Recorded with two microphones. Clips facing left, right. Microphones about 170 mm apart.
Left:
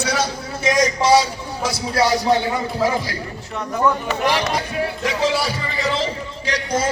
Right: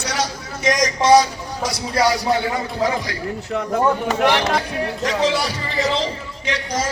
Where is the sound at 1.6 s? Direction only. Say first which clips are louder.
Even; 5° left (ahead or behind).